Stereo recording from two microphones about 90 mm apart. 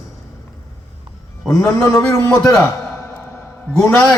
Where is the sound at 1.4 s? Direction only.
5° left (ahead or behind).